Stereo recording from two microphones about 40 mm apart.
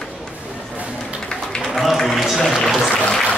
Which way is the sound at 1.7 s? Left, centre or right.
Centre.